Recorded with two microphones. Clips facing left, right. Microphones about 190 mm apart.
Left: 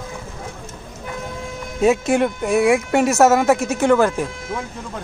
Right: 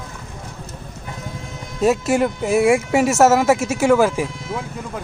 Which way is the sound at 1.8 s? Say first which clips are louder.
Left 1 dB; centre (ahead or behind).